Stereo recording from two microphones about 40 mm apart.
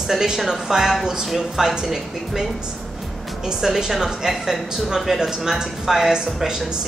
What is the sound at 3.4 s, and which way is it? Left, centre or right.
A woman's voice, centre.